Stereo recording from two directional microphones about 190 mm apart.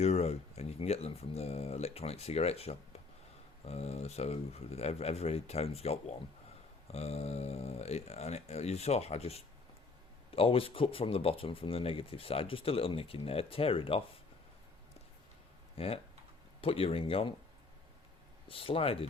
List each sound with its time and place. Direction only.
0.0 s speech: 35° left (ahead or behind)
15.8 s speech: 30° left (ahead or behind)
18.4 s speech: 30° left (ahead or behind)